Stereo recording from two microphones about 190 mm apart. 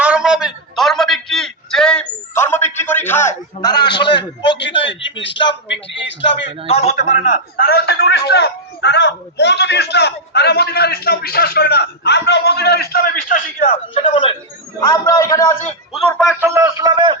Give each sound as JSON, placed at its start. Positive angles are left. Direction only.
{"t": 0.0, "sound": "a sound", "side_deg": -5}
{"t": 4.0, "sound": "a man's voice", "side_deg": 65}
{"t": 4.8, "sound": "a man's voice", "side_deg": 75}
{"t": 6.7, "sound": "a man's voice", "side_deg": 35}
{"t": 7.5, "sound": "a man's voice", "side_deg": 60}
{"t": 13.6, "sound": "speech", "side_deg": 30}
{"t": 14.8, "sound": "a man's voice", "side_deg": 15}
{"t": 16.4, "sound": "a man's voice", "side_deg": -15}